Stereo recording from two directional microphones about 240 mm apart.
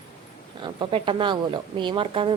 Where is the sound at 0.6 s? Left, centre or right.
Right.